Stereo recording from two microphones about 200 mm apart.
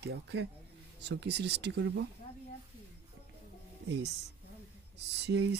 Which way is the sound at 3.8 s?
60° right (ahead or behind).